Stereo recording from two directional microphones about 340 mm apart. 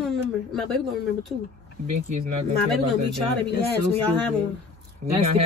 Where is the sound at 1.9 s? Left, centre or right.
Right.